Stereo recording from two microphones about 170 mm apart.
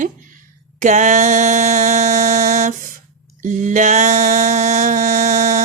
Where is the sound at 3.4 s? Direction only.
50° right (ahead or behind).